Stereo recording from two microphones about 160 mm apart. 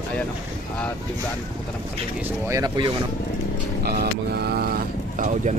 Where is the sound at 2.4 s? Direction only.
20° right (ahead or behind).